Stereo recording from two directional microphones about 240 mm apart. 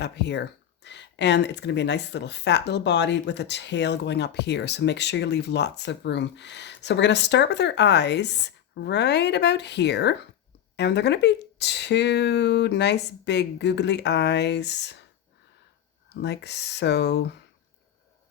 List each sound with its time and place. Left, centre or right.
0.0 s speech: left
16.2 s speech: left